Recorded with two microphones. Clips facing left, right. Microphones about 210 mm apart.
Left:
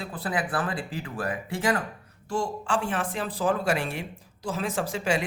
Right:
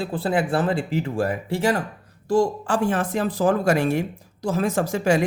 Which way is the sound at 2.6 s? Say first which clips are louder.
Right 6 dB; 40° right (ahead or behind).